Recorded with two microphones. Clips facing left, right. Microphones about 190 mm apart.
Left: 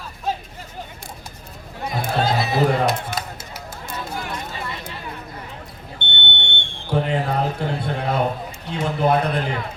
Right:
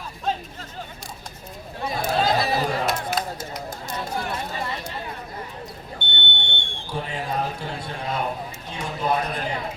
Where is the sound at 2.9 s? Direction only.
Centre (ahead or behind).